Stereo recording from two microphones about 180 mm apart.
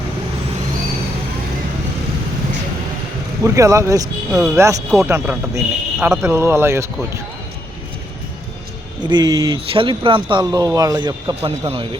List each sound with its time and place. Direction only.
3.4 s a man's voice: 15° right (ahead or behind)
4.3 s speech: 5° right (ahead or behind)
4.5 s a man's voice: 15° right (ahead or behind)
9.0 s speech: 25° right (ahead or behind)